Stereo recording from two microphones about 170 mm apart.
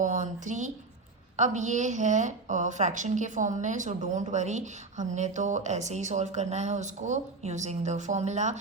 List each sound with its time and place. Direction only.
0.0 s a woman's voice: 45° right (ahead or behind)